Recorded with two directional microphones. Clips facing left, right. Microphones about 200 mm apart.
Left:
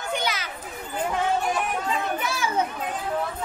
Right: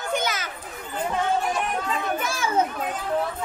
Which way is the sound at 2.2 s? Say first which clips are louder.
Right 2 dB; 45° right (ahead or behind).